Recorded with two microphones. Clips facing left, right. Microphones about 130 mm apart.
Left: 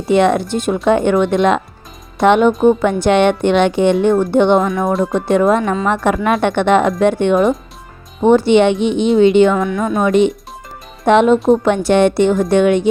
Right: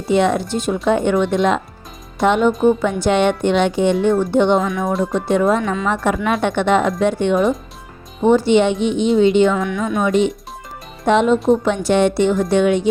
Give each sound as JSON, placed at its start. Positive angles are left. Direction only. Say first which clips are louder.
{"t": 0.1, "sound": "a woman's voice", "louder": "left 3 dB", "side_deg": 60}
{"t": 9.6, "sound": "speech", "louder": "left 3 dB", "side_deg": 35}
{"t": 10.0, "sound": "a woman's voice", "louder": "left 4 dB", "side_deg": 60}